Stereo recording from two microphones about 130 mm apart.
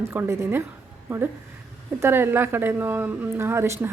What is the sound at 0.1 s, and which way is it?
Speech, 20° right (ahead or behind).